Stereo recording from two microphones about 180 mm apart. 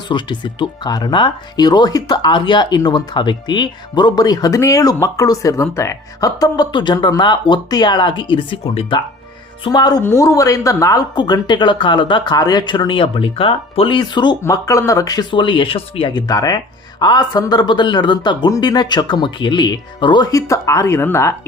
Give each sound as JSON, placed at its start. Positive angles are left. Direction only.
{"t": 0.1, "sound": "speech", "side_deg": 25}